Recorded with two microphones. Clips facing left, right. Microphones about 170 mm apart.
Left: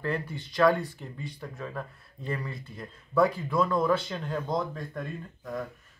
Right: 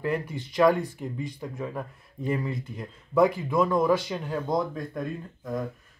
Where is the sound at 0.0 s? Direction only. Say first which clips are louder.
Right 3 dB; 15° right (ahead or behind).